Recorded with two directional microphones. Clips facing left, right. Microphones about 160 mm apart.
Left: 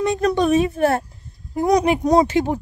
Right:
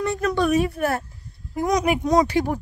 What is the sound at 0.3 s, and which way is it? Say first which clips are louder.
A woman's voice: left 1 dB; 20° left (ahead or behind).